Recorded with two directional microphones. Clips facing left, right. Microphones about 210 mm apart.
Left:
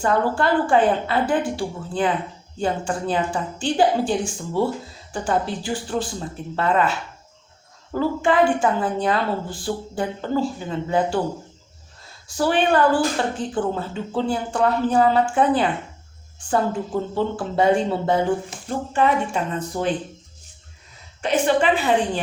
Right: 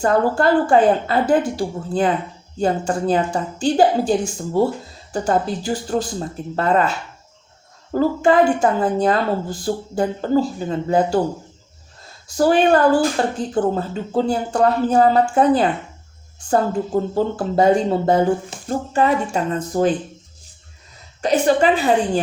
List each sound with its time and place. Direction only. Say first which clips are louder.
0.0 s a woman's voice: right 4 dB; 40° right (ahead or behind)
7.9 s a woman's voice: right 4 dB; 40° right (ahead or behind)
12.4 s a woman's voice: right 4 dB; 40° right (ahead or behind)
21.2 s a woman's voice: right 3 dB; 40° right (ahead or behind)